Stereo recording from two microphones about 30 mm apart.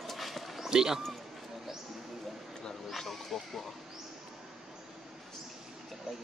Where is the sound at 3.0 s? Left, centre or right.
Centre.